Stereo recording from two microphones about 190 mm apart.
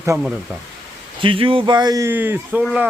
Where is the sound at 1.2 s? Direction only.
25° right (ahead or behind); by 2.8 s 10° right (ahead or behind).